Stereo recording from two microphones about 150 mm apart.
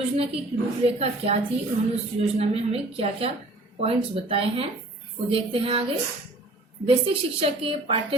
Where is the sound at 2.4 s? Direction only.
40° right (ahead or behind).